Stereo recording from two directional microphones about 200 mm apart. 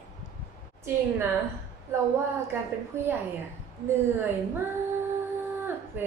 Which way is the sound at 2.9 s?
15° right (ahead or behind).